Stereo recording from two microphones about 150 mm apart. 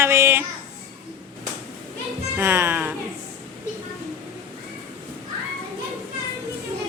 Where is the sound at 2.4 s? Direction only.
15° right (ahead or behind).